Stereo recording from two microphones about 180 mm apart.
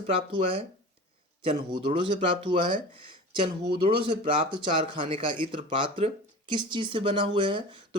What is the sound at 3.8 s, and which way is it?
Speech, 25° right (ahead or behind).